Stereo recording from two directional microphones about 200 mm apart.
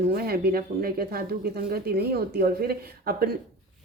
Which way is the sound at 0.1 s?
50° right (ahead or behind).